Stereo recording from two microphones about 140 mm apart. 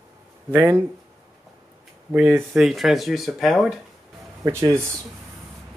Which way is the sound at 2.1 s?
10° right (ahead or behind).